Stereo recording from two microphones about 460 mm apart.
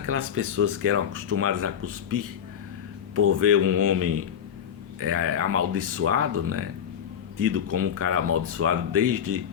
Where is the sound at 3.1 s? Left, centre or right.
Right.